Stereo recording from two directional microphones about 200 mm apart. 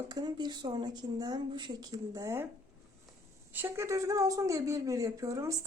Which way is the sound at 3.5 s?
15° right (ahead or behind).